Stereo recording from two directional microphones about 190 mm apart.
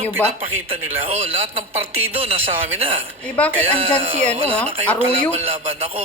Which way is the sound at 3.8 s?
35° right (ahead or behind).